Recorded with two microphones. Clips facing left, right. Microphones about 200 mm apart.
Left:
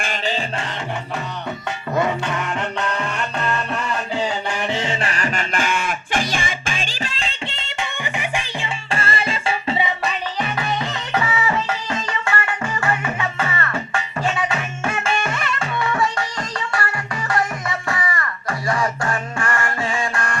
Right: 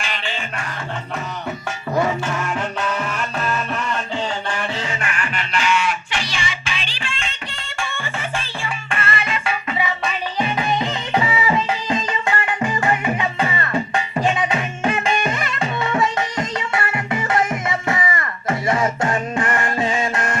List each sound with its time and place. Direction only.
0.0 s music: 45° left (ahead or behind)
2.2 s music: 5° right (ahead or behind); by 4.9 s 20° left (ahead or behind)
4.9 s music: 35° left (ahead or behind)
7.5 s music: 20° left (ahead or behind)
8.9 s music: 30° left (ahead or behind)
10.4 s music: 20° right (ahead or behind)